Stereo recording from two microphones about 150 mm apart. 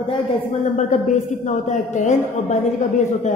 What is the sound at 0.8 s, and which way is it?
A woman's voice, 55° left (ahead or behind).